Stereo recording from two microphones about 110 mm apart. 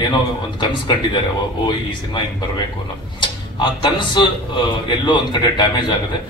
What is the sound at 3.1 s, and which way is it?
Speech, 45° left (ahead or behind).